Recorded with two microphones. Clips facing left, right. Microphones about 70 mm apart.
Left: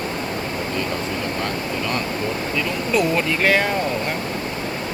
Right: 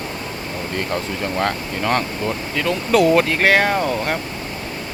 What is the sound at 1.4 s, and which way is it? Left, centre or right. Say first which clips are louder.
Speech: right 3 dB; right.